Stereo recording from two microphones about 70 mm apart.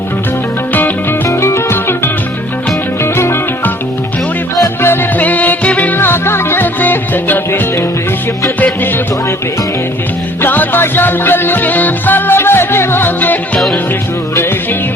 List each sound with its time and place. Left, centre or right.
0.7 s music: left
1.3 s music: left
3.0 s music: left
4.6 s music: left
5.2 s music: left
10.4 s music: left